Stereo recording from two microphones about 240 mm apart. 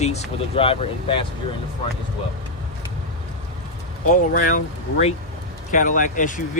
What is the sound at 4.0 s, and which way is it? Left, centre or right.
Speech, left.